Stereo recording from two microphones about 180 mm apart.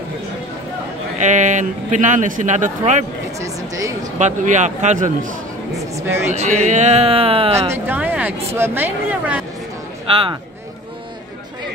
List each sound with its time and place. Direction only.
1.2 s speech: 45° right (ahead or behind)
3.3 s a sound: 15° right (ahead or behind)
4.2 s speech: 40° right (ahead or behind)
5.8 s speech: 15° right (ahead or behind)
6.3 s speech: 40° right (ahead or behind)
7.7 s speech: 10° right (ahead or behind)